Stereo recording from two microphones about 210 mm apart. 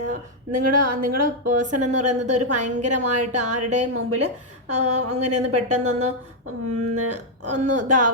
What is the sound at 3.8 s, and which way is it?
Speech, 90° right.